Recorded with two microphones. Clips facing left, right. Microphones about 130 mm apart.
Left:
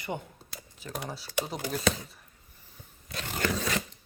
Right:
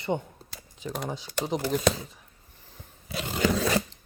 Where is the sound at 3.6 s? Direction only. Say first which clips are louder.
Right 6 dB; 35° right (ahead or behind).